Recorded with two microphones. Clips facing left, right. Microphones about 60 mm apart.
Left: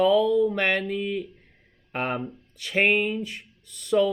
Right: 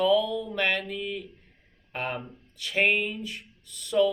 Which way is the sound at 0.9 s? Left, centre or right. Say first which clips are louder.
Left 5 dB; left.